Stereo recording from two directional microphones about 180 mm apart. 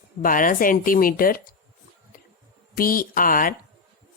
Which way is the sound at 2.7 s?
50° left (ahead or behind).